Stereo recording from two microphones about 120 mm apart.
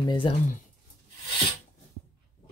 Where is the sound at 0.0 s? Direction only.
40° left (ahead or behind).